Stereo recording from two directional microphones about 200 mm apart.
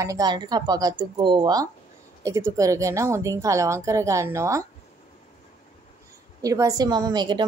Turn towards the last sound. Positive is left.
turn(degrees=-20)  # may be behind; listen again after turning